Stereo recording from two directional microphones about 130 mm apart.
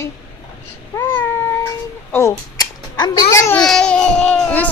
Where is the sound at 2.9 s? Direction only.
30° left (ahead or behind).